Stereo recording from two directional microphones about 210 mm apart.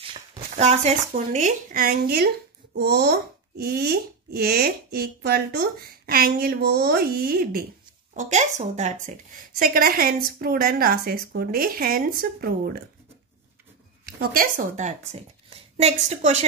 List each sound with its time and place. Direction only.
0.0 s a child's voice: 25° right (ahead or behind); by 12.7 s 45° right (ahead or behind)
14.0 s a woman's voice: 40° right (ahead or behind)